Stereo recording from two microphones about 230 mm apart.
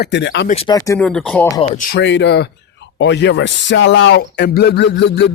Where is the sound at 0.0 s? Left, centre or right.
Left.